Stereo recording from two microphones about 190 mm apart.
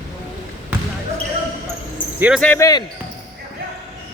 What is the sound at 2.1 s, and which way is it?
Speech, 10° right (ahead or behind).